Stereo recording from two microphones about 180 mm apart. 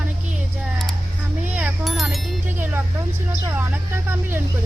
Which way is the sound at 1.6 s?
Centre (ahead or behind).